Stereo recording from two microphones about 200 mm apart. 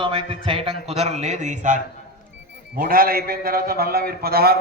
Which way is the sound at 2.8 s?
45° right (ahead or behind).